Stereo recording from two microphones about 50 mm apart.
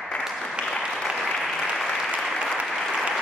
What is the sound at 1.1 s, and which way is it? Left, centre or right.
Applause, centre.